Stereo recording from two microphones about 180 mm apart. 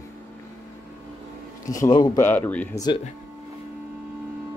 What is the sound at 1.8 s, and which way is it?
Speech, 20° left (ahead or behind).